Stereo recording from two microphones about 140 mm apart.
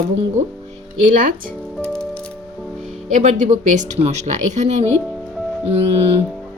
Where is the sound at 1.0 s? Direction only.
75° right (ahead or behind).